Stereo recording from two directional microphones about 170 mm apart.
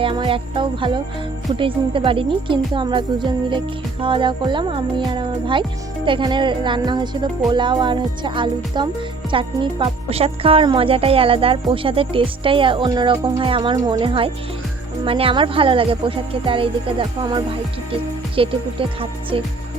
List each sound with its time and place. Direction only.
0.0 s speech: 30° right (ahead or behind)
9.3 s music: 30° right (ahead or behind)